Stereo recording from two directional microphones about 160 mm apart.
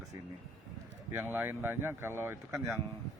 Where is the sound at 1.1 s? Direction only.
10° right (ahead or behind).